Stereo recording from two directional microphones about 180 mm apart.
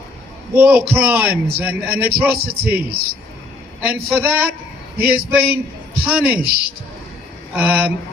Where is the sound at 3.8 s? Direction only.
10° right (ahead or behind).